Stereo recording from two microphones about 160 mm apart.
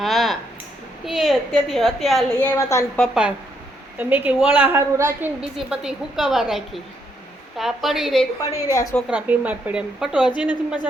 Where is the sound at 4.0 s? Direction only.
10° right (ahead or behind).